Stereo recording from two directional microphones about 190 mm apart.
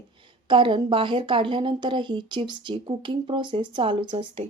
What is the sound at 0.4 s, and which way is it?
A woman's voice, 25° right (ahead or behind).